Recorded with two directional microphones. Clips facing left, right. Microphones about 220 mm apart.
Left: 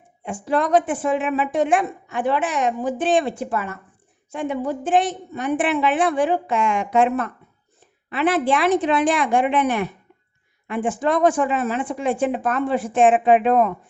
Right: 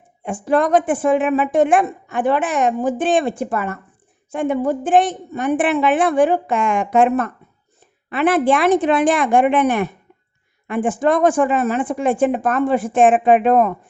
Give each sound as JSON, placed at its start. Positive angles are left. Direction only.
{"t": 0.2, "sound": "a woman's voice", "side_deg": -50}